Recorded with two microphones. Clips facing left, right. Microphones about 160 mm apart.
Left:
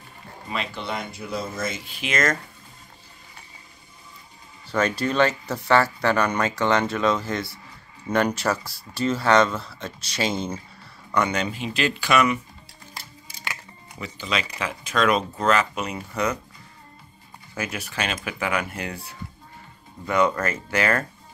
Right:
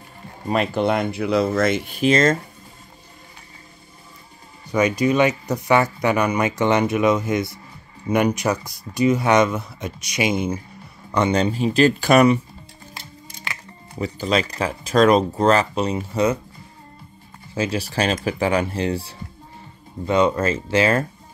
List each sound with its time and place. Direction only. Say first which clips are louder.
0.5 s speech: right 11 dB; 45° right (ahead or behind); by 2.0 s 65° right (ahead or behind)
2.0 s speech: right 7 dB; 30° right (ahead or behind)
4.6 s speech: right 5 dB; 15° right (ahead or behind)
11.1 s speech: right 5 dB; 25° right (ahead or behind)
12.9 s music: right 2 dB; 5° left (ahead or behind)
13.9 s speech: right 8 dB; 40° right (ahead or behind)
17.6 s speech: right 7 dB; 30° right (ahead or behind)